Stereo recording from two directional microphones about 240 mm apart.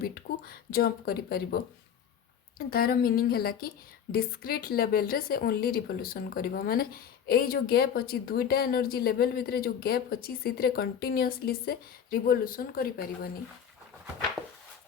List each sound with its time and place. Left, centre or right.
0.0 s a woman's voice: left